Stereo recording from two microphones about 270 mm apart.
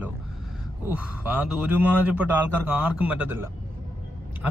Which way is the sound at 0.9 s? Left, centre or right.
Centre.